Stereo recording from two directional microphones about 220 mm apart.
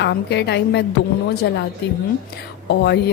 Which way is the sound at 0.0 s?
50° left (ahead or behind).